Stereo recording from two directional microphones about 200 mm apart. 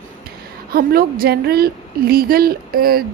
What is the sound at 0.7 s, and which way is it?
A woman's voice, 50° right (ahead or behind).